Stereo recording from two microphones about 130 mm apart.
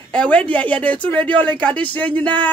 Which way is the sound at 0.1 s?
10° left (ahead or behind).